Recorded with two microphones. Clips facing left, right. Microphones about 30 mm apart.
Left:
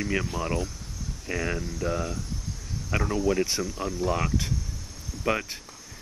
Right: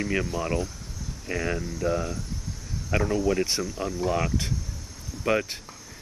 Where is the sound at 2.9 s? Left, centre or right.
Centre.